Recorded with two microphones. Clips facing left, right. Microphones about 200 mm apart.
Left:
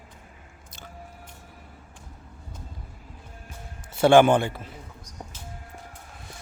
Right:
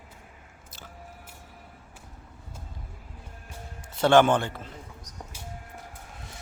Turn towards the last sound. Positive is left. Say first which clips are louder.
# even
turn(degrees=-10)  # may be behind; listen again after turning